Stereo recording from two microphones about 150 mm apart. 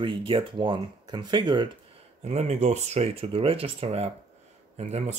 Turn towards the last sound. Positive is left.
turn(degrees=-45)  # may be behind; listen again after turning